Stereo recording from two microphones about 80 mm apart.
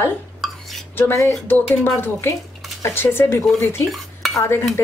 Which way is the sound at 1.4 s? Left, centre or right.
Left.